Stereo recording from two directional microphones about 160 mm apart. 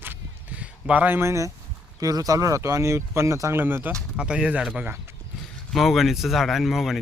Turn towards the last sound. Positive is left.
turn(degrees=0)  # may be behind; listen again after turning